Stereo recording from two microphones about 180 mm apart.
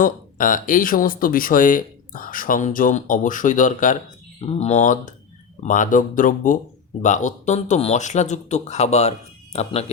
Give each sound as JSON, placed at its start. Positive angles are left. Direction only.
{"t": 0.0, "sound": "speech", "side_deg": 50}
{"t": 4.4, "sound": "speech", "side_deg": 35}